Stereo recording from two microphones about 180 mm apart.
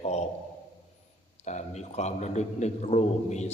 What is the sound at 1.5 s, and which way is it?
A man's voice, 40° left (ahead or behind).